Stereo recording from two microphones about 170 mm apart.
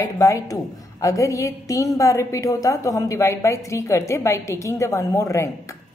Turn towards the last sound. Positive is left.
turn(degrees=15)  # may be behind; listen again after turning